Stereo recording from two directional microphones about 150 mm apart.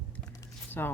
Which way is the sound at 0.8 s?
15° left (ahead or behind).